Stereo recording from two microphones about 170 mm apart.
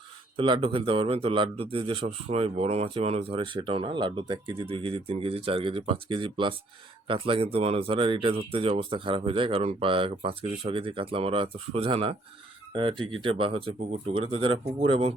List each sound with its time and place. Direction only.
0.3 s a man's voice: 30° right (ahead or behind)